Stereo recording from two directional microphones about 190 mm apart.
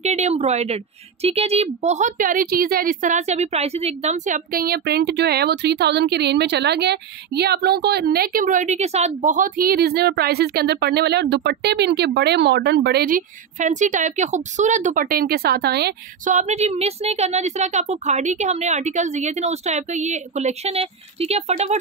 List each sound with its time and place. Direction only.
0.0 s speech: 35° right (ahead or behind); by 15.9 s 60° right (ahead or behind)
16.3 s speech: 40° right (ahead or behind)